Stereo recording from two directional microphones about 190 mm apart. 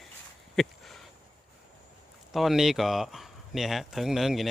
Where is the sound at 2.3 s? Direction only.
Centre (ahead or behind).